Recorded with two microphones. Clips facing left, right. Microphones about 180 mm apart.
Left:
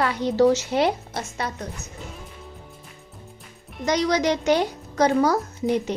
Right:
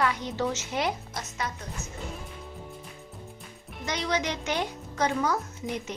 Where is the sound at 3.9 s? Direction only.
40° left (ahead or behind).